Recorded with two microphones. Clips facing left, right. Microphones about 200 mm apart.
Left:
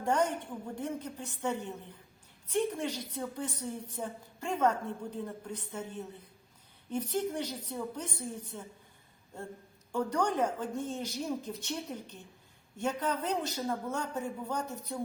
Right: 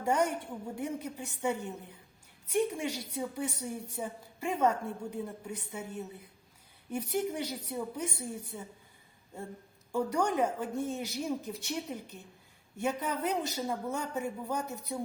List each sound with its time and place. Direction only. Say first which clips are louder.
0.0 s a woman's voice: even; 10° right (ahead or behind)
9.9 s a woman's voice: right 1 dB; 10° right (ahead or behind)